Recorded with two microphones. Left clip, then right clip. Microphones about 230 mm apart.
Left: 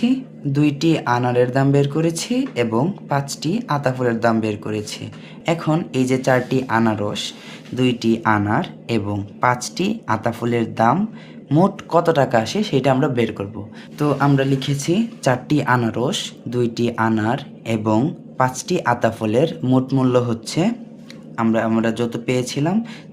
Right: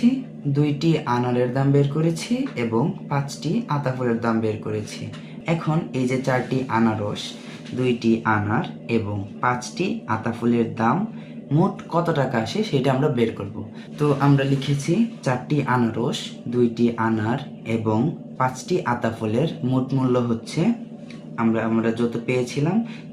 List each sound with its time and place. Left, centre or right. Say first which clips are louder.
0.5 s speech: left 4 dB; left